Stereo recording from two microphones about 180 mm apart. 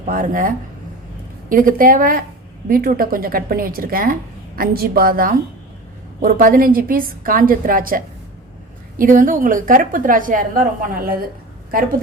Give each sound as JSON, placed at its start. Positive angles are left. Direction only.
{"t": 0.0, "sound": "a woman's voice", "side_deg": -50}